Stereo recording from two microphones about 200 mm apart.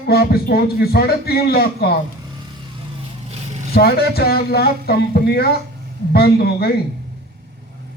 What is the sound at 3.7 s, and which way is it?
Speech, 50° left (ahead or behind).